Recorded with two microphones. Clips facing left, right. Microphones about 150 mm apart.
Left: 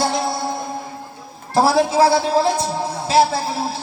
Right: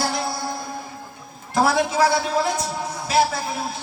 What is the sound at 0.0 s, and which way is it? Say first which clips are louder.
Music: left 4 dB; 25° left (ahead or behind).